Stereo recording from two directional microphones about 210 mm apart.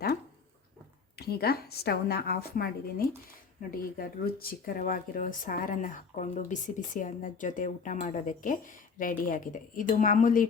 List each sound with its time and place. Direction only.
1.1 s a woman's voice: 50° left (ahead or behind)